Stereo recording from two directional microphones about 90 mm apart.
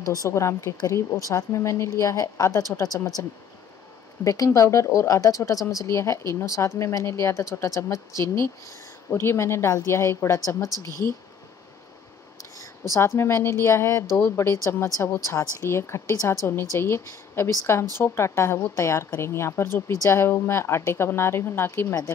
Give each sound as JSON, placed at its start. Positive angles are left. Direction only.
{"t": 0.0, "sound": "speech", "side_deg": 40}
{"t": 4.2, "sound": "speech", "side_deg": 40}
{"t": 12.9, "sound": "a woman's voice", "side_deg": 30}